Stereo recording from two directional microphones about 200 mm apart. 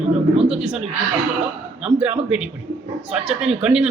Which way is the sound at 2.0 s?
5° right (ahead or behind).